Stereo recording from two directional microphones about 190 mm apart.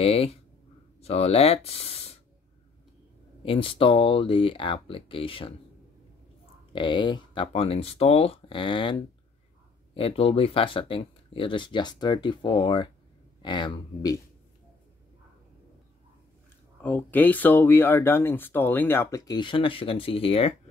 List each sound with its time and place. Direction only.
0.0 s speech: 30° left (ahead or behind)
3.4 s speech: 30° left (ahead or behind)
6.7 s speech: 25° left (ahead or behind)
16.8 s speech: 10° left (ahead or behind); by 20.5 s 30° left (ahead or behind)